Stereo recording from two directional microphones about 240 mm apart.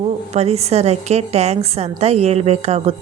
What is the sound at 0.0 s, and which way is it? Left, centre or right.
Speech, right.